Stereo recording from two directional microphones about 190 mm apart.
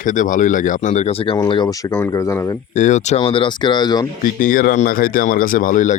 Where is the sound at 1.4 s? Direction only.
25° left (ahead or behind).